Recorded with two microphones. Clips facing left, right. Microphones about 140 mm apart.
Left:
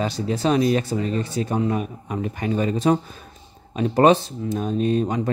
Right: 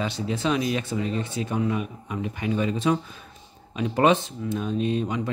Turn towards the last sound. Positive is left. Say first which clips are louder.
# left 4 dB
turn(degrees=45)  # may be behind; listen again after turning